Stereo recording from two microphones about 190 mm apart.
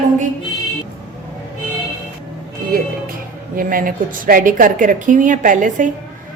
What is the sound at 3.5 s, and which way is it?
A woman's voice, 45° right (ahead or behind).